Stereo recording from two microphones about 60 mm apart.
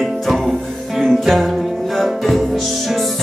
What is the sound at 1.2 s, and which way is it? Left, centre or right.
Music, centre.